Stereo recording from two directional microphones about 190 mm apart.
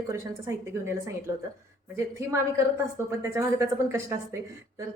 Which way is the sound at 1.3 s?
15° right (ahead or behind).